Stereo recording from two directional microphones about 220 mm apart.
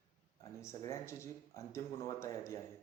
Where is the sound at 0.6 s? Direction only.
15° left (ahead or behind).